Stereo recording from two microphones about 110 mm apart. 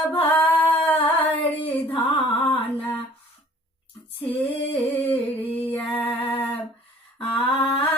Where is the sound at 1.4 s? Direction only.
55° left (ahead or behind).